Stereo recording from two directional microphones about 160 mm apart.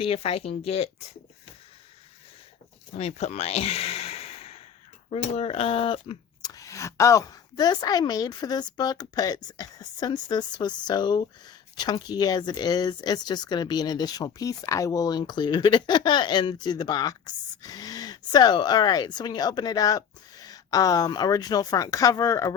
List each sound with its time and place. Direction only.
0.0 s speech: 35° left (ahead or behind)
3.0 s a sound: 45° left (ahead or behind)
5.1 s speech: 40° left (ahead or behind); by 22.5 s 20° left (ahead or behind)